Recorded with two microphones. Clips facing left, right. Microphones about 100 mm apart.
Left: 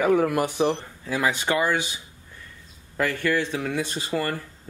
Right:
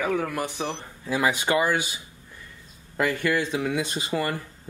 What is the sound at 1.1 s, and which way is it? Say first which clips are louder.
Speech: right 1 dB; 10° right (ahead or behind).